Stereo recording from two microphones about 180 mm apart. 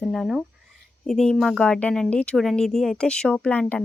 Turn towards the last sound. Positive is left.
turn(degrees=5)  # may be behind; listen again after turning